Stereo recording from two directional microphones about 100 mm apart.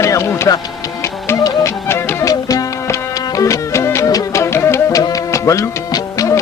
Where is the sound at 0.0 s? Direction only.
30° left (ahead or behind).